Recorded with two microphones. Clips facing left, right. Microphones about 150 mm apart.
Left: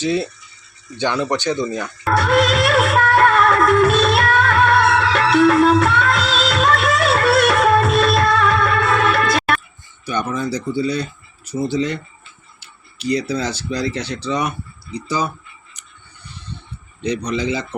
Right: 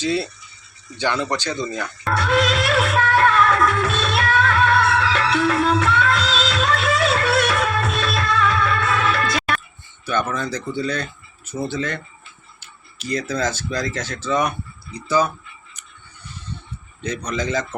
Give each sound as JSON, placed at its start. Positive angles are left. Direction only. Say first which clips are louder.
{"t": 0.0, "sound": "speech", "louder": "left 2 dB", "side_deg": 15}
{"t": 2.1, "sound": "music", "louder": "left 4 dB", "side_deg": 50}
{"t": 10.1, "sound": "speech", "louder": "left 1 dB", "side_deg": 15}
{"t": 13.2, "sound": "speech", "louder": "left 1 dB", "side_deg": 15}
{"t": 17.3, "sound": "speech", "louder": "left 2 dB", "side_deg": 15}